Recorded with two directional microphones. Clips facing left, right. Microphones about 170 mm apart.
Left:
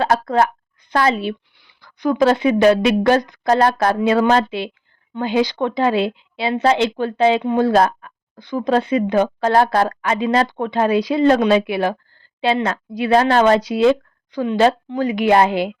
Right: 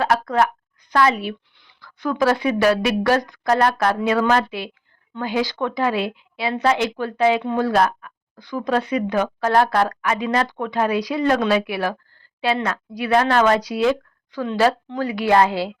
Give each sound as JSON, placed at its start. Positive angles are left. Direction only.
{"t": 0.0, "sound": "a woman's voice", "side_deg": 30}
{"t": 1.5, "sound": "speech", "side_deg": 15}